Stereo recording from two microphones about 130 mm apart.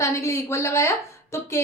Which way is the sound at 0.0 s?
20° left (ahead or behind).